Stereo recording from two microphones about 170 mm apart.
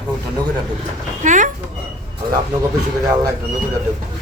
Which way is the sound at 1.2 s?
50° right (ahead or behind).